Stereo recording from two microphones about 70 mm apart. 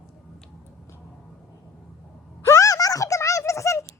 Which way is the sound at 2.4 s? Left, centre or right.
Left.